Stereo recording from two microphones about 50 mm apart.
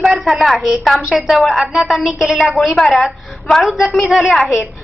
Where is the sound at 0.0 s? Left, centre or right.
Centre.